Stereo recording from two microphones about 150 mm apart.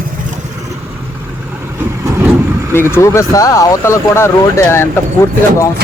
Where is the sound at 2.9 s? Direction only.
20° left (ahead or behind).